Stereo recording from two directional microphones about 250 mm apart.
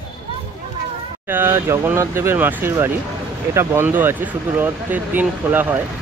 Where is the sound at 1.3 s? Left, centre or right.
Centre.